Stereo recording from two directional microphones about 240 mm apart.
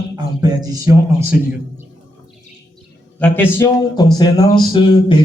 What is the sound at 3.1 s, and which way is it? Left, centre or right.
Speech, centre.